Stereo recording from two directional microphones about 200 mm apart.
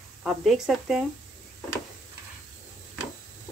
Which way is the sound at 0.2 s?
Centre (ahead or behind).